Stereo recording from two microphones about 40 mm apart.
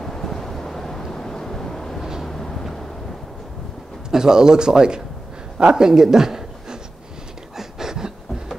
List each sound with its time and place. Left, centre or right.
0.0 s vehicle: centre
4.1 s speech: centre
5.9 s a sound: centre